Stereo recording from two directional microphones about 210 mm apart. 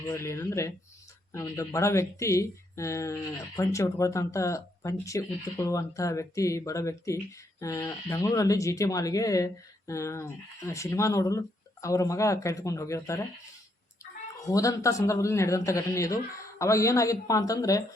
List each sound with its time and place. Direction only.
0.1 s speech: 15° left (ahead or behind)